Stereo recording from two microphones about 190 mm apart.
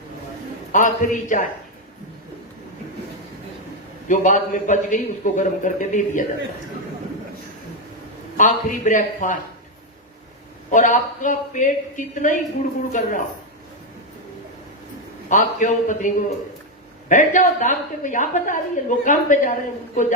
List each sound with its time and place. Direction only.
0.7 s a man's voice: 40° left (ahead or behind)
4.1 s a woman's voice: 40° left (ahead or behind)
8.4 s a man's voice: 40° left (ahead or behind)
10.7 s a woman's voice: 40° left (ahead or behind)
15.3 s a woman's voice: 40° left (ahead or behind)